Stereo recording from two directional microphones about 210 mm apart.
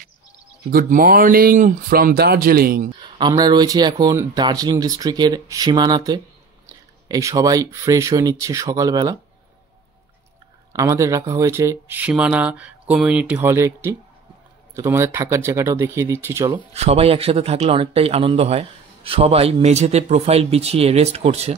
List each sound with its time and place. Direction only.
0.7 s speech: 40° right (ahead or behind)
3.0 s speech: 20° right (ahead or behind)
10.7 s speech: 15° right (ahead or behind)
16.7 s speech: 30° right (ahead or behind)